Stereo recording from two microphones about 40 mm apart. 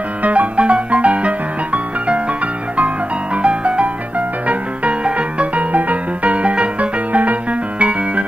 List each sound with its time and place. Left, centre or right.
0.2 s music: right
3.4 s music: right